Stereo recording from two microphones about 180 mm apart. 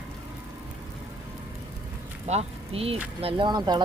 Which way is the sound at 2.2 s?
35° right (ahead or behind).